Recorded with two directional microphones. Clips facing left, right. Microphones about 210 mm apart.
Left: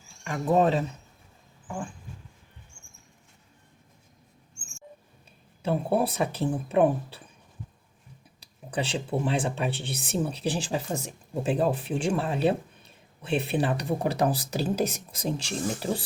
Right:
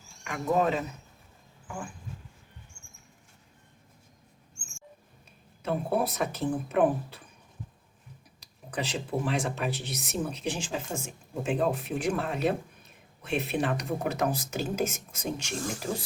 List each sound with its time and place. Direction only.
0.3 s speech: 30° left (ahead or behind)
5.6 s speech: 30° left (ahead or behind)
8.4 s speech: 30° left (ahead or behind)